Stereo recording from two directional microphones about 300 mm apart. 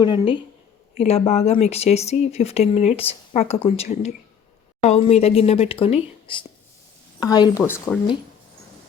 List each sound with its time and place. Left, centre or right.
0.0 s speech: centre